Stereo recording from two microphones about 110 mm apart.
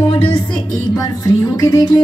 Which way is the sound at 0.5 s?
30° left (ahead or behind).